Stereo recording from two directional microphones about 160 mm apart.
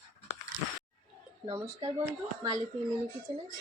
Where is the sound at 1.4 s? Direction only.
30° right (ahead or behind).